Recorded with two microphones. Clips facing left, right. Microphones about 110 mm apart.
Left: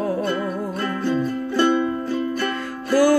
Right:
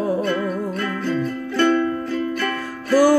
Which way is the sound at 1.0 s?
25° left (ahead or behind).